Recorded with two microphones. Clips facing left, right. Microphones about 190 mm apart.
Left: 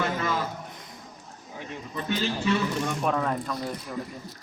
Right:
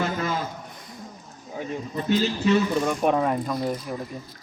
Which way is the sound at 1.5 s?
40° right (ahead or behind).